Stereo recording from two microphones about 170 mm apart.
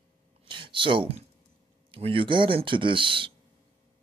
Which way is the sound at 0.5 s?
30° right (ahead or behind).